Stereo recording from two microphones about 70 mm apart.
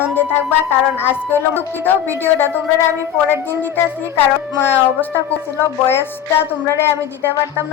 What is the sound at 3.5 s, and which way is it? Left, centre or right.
Speech, left.